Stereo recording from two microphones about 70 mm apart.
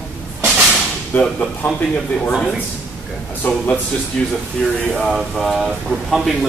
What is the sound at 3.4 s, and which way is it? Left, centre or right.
Speech, left.